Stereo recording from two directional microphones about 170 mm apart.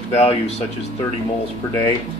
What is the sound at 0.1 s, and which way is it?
Speech, 35° left (ahead or behind).